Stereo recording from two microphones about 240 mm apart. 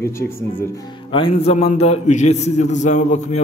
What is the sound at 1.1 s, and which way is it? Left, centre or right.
A man's voice, left.